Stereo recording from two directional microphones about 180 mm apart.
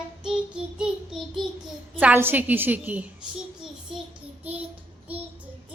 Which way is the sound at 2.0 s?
10° right (ahead or behind).